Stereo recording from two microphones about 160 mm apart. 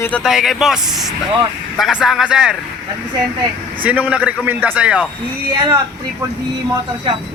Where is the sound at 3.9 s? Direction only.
10° right (ahead or behind).